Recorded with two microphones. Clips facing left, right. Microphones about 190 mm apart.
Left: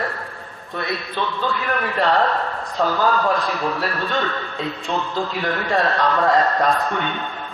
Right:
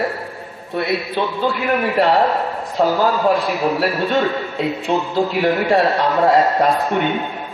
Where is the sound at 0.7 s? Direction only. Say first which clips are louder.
Right 6 dB; 10° right (ahead or behind).